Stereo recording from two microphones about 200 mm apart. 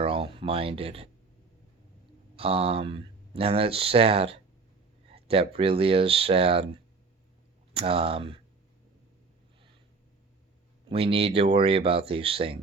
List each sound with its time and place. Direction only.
0.0 s speech: 30° right (ahead or behind)
2.3 s speech: 30° right (ahead or behind)
7.7 s speech: 30° right (ahead or behind)
10.8 s speech: 30° right (ahead or behind)